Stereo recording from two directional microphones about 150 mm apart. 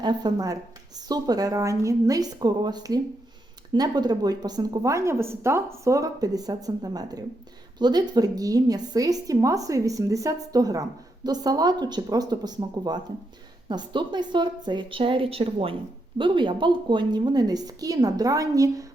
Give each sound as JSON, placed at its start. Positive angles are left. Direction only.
{"t": 0.0, "sound": "a woman's voice", "side_deg": -30}